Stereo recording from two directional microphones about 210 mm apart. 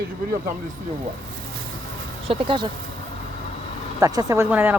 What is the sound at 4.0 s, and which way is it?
Speech, 15° right (ahead or behind).